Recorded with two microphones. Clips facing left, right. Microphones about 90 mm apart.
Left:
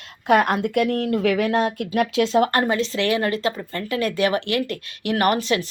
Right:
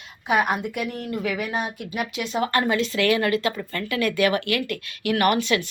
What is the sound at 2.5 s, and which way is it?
Speech, 35° left (ahead or behind).